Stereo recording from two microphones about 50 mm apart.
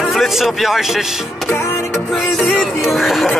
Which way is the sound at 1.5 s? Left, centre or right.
Left.